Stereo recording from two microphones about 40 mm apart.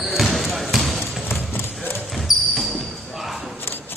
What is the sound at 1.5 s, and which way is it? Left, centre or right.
Clip-clop, left.